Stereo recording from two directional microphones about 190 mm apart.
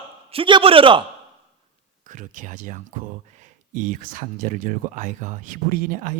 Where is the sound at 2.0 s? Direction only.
45° right (ahead or behind).